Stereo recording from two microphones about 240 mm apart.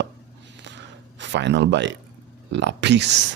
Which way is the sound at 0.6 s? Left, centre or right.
Right.